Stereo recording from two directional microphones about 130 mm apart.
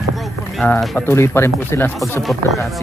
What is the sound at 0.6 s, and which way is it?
Speech, 5° left (ahead or behind).